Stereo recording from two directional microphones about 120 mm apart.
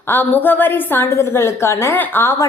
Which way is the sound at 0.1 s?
15° left (ahead or behind).